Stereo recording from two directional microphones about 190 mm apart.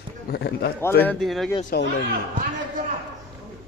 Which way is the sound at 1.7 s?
55° left (ahead or behind).